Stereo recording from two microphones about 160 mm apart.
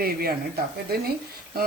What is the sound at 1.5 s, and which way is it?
Speech, 70° right (ahead or behind).